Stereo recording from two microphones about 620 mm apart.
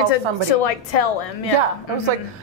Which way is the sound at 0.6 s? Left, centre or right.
Left.